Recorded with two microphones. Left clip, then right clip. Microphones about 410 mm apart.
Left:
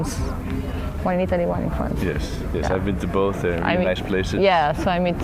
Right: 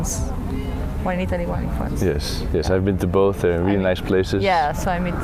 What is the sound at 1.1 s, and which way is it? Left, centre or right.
Speech, left.